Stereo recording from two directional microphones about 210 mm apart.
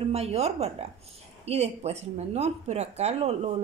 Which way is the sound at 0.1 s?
30° right (ahead or behind).